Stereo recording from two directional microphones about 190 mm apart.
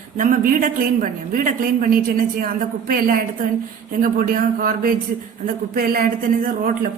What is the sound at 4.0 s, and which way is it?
A woman's voice, 45° right (ahead or behind).